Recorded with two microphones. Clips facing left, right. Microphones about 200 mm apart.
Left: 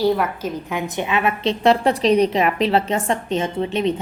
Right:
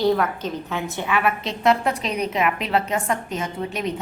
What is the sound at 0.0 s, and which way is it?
A woman's voice, 10° left (ahead or behind).